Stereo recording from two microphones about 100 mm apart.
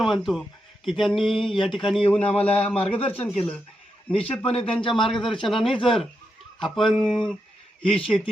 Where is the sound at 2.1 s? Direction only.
15° left (ahead or behind).